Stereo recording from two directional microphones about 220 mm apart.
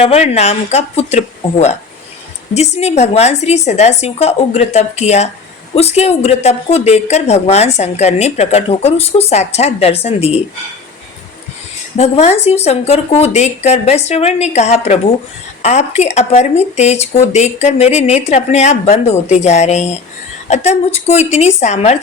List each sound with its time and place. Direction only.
0.0 s a woman's voice: 30° left (ahead or behind)
11.9 s a woman's voice: 30° left (ahead or behind)